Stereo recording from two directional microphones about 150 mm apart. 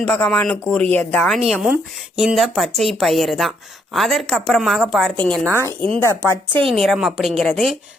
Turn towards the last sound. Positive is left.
turn(degrees=0)  # may be behind; listen again after turning